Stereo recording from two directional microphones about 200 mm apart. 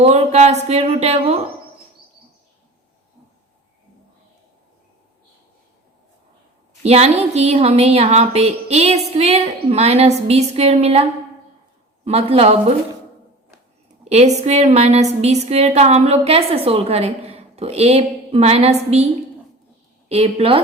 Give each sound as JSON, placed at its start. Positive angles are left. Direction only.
{"t": 0.0, "sound": "a woman's voice", "side_deg": -30}
{"t": 6.8, "sound": "a woman's voice", "side_deg": -30}
{"t": 14.0, "sound": "a woman's voice", "side_deg": -30}
{"t": 20.1, "sound": "a woman's voice", "side_deg": -30}